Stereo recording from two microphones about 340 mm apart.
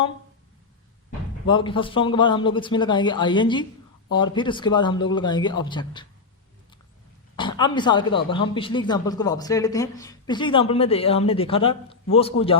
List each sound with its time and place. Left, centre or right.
1.5 s speech: centre
7.3 s speech: centre